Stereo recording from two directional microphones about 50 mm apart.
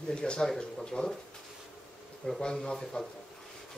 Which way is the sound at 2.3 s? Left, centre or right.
Centre.